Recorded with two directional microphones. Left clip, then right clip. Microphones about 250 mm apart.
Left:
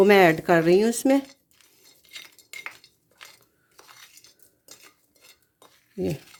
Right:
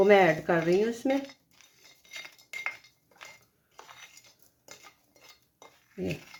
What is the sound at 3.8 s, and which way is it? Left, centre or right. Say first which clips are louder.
Cutlery: even; centre.